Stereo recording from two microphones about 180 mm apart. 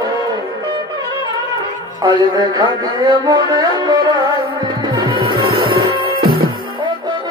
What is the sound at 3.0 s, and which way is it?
Music, 25° right (ahead or behind).